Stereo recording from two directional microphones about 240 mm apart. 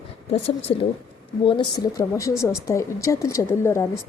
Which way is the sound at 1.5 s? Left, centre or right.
Centre.